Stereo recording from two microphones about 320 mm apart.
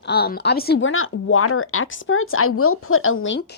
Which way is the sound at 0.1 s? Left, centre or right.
Left.